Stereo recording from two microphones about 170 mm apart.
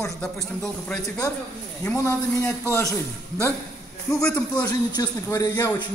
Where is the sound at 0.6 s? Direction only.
15° left (ahead or behind).